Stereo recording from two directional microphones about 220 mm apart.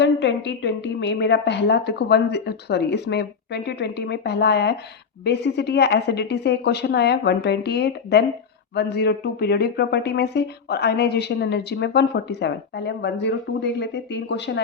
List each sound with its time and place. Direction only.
0.0 s speech: 55° left (ahead or behind)